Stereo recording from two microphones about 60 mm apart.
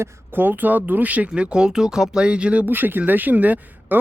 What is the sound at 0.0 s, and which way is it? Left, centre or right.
Speech, right.